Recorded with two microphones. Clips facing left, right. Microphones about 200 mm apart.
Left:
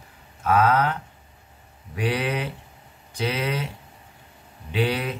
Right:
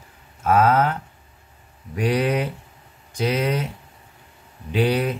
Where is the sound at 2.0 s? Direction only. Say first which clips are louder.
Right 4 dB; 45° right (ahead or behind).